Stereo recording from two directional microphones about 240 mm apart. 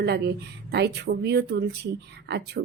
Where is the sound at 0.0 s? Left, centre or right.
Right.